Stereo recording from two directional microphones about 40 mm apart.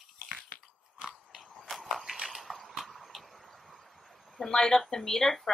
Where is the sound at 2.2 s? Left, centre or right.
Centre.